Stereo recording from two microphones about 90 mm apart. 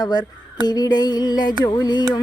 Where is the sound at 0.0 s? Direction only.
50° left (ahead or behind).